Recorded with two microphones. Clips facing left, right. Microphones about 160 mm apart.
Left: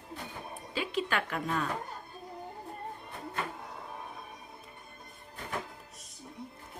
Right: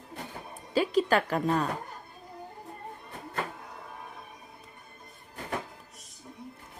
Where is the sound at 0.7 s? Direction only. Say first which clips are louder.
Right 8 dB; 40° right (ahead or behind).